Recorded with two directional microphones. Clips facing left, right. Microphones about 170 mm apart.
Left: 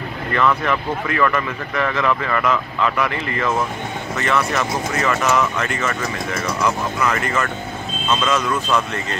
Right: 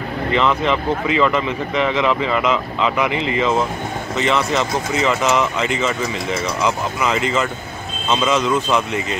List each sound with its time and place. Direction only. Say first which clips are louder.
0.3 s speech: right 1 dB; 20° right (ahead or behind)